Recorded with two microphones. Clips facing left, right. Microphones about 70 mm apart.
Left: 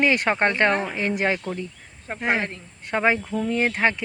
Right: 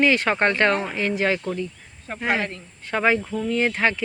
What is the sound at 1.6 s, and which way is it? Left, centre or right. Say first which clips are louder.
Cricket: right 4 dB; left.